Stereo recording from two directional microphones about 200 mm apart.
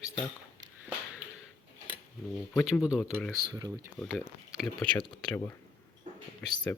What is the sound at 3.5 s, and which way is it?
Speech, 15° right (ahead or behind).